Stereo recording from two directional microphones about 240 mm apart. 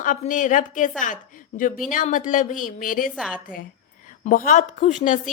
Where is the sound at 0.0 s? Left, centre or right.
Left.